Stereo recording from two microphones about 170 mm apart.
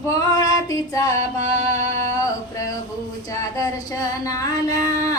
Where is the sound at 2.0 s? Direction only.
20° left (ahead or behind).